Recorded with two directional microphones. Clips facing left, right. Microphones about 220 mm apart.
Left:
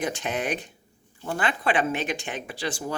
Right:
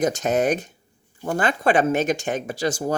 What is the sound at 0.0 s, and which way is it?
Speech, 40° right (ahead or behind).